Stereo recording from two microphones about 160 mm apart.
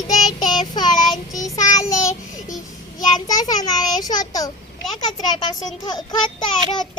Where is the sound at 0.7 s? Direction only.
25° left (ahead or behind).